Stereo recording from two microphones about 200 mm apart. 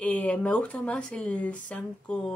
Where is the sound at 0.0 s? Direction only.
5° left (ahead or behind).